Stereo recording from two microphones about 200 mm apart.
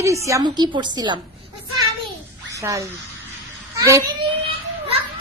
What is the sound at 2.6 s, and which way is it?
Speech, 15° right (ahead or behind).